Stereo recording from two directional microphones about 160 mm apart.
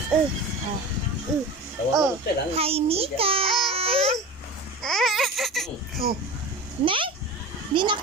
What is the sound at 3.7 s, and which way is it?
Babbling, 35° right (ahead or behind).